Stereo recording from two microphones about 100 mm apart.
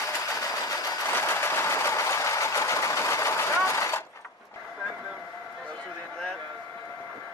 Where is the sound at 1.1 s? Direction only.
25° left (ahead or behind).